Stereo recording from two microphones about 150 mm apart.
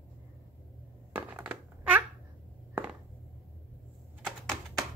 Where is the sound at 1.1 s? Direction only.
10° right (ahead or behind).